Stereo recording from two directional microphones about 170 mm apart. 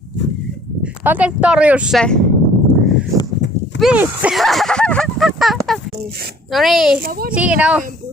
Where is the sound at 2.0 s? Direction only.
5° left (ahead or behind).